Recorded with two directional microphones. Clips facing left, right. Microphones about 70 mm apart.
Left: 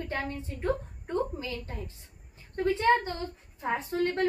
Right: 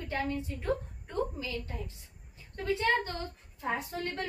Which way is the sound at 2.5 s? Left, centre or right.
Left.